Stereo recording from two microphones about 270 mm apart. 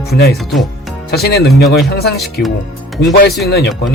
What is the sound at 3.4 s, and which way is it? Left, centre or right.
Speech, left.